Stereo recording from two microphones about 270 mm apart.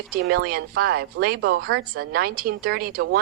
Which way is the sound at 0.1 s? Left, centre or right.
Right.